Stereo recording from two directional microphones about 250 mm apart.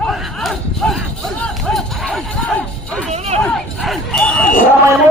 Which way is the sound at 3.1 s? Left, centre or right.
Right.